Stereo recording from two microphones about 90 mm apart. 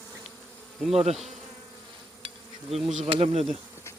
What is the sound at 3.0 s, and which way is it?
Speech, 90° right.